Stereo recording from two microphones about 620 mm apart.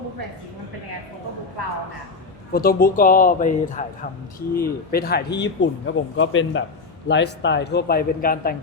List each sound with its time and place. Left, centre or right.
2.5 s speech: centre